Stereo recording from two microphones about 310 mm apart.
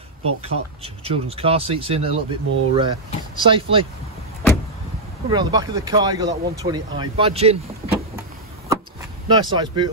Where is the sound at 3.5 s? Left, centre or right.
Centre.